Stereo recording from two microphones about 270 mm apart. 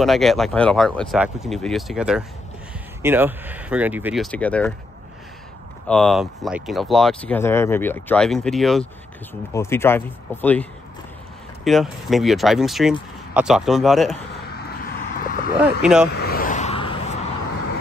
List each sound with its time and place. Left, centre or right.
0.0 s speech: centre
5.9 s speech: centre
15.1 s a sound: left
15.8 s speech: centre
16.1 s vehicle: left; by 17.0 s centre